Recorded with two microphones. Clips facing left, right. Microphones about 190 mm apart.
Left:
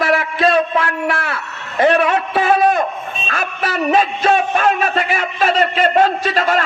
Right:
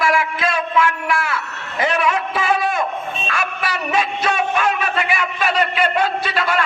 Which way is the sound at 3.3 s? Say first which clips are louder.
Left 4 dB; 40° left (ahead or behind).